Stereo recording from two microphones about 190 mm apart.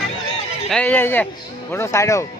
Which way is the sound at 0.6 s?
5° left (ahead or behind).